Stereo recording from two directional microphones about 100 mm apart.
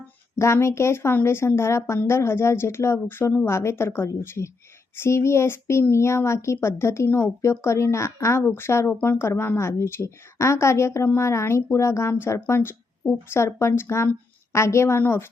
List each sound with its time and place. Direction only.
0.3 s speech: 25° left (ahead or behind)